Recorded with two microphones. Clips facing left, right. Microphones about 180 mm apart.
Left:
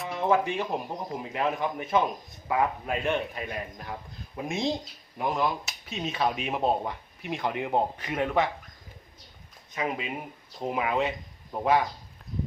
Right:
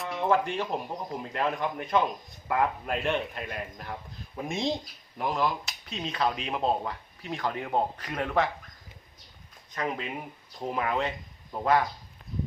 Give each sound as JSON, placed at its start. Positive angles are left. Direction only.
{"t": 0.0, "sound": "speech", "side_deg": 0}
{"t": 9.7, "sound": "speech", "side_deg": 5}